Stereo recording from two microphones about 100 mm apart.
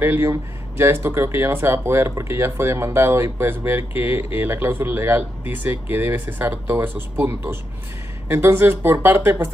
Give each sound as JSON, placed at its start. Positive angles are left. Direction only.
{"t": 0.0, "sound": "speech", "side_deg": -20}